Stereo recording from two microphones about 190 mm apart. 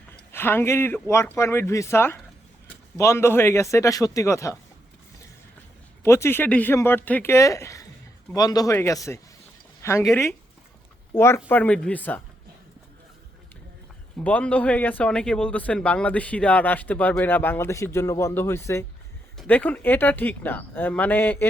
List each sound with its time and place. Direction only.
0.3 s speech: 10° left (ahead or behind)
6.0 s speech: 15° left (ahead or behind)
14.3 s speech: 5° left (ahead or behind)